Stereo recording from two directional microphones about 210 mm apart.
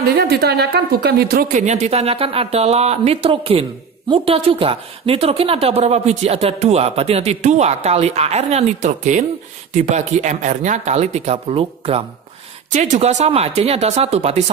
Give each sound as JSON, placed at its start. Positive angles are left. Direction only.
{"t": 0.0, "sound": "a woman's voice", "side_deg": -50}